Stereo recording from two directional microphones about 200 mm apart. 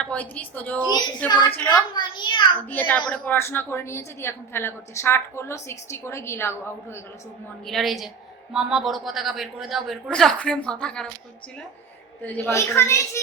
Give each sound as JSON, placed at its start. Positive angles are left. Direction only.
{"t": 0.0, "sound": "a woman's voice", "side_deg": 5}
{"t": 0.9, "sound": "a child's voice", "side_deg": 20}
{"t": 1.5, "sound": "a woman's voice", "side_deg": 5}
{"t": 1.9, "sound": "a child's voice", "side_deg": 25}
{"t": 2.6, "sound": "a woman's voice", "side_deg": 10}
{"t": 7.6, "sound": "a woman's voice", "side_deg": 0}
{"t": 12.2, "sound": "a woman's voice", "side_deg": 10}